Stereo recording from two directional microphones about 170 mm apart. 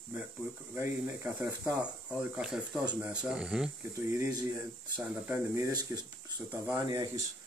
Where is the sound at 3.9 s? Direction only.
15° right (ahead or behind).